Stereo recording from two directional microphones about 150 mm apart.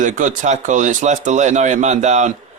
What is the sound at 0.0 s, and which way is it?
A man's voice, 55° right (ahead or behind).